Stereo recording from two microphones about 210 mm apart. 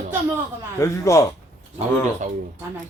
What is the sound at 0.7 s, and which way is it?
Speech, 15° left (ahead or behind).